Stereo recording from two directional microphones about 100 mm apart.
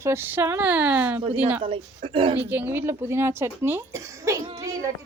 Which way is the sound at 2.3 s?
20° right (ahead or behind).